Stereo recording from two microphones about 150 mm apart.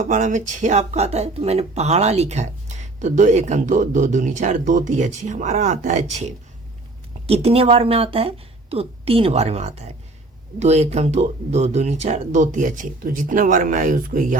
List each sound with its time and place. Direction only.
0.0 s a woman's voice: 55° right (ahead or behind)